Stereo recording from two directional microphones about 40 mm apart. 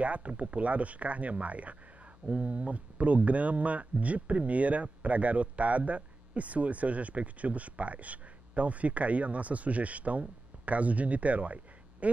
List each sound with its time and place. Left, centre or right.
0.0 s speech: right